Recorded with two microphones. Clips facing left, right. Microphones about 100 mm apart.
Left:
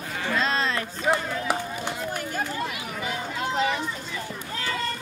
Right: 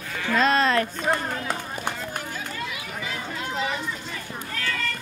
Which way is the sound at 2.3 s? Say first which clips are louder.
Left 4 dB; 50° left (ahead or behind).